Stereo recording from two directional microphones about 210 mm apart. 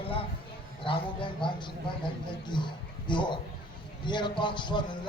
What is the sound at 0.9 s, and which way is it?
Speech, 25° left (ahead or behind).